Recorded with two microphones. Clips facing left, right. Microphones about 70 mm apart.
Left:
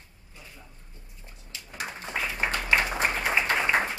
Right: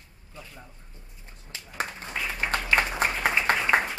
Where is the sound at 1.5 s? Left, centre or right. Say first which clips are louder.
Right 3 dB; right.